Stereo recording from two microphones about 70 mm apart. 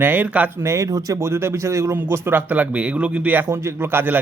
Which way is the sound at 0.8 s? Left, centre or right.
Right.